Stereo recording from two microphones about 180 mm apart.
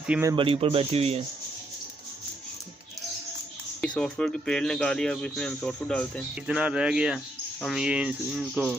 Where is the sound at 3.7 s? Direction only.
5° left (ahead or behind).